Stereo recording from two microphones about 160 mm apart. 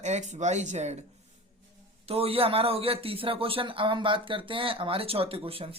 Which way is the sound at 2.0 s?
40° right (ahead or behind).